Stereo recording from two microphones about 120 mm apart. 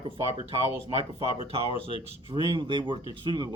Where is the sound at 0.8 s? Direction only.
45° right (ahead or behind).